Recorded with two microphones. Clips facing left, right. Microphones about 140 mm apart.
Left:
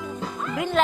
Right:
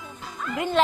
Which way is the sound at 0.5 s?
Centre (ahead or behind).